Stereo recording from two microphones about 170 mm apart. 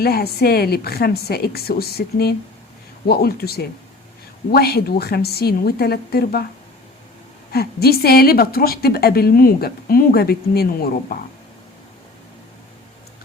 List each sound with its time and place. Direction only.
0.0 s a woman's voice: 65° left (ahead or behind)
7.5 s a woman's voice: 65° left (ahead or behind)